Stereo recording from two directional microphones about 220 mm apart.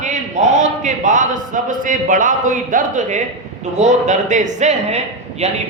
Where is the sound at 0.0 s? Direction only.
35° right (ahead or behind).